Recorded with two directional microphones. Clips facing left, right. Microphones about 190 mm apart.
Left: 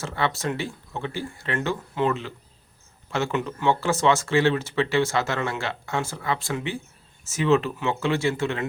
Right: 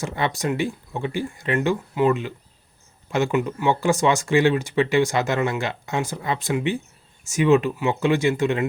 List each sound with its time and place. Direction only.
0.0 s speech: 15° right (ahead or behind)